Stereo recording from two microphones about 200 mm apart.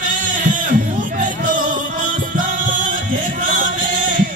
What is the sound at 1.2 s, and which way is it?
Music, 40° right (ahead or behind).